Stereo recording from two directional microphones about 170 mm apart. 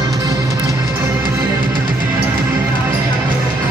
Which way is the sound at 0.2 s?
20° right (ahead or behind).